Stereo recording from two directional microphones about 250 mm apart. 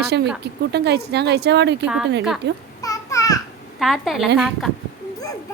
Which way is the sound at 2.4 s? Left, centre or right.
Right.